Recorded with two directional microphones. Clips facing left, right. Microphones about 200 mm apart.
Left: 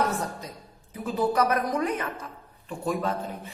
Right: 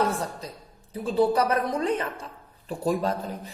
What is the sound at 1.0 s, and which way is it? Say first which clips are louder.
A woman's voice: right 2 dB; 30° right (ahead or behind).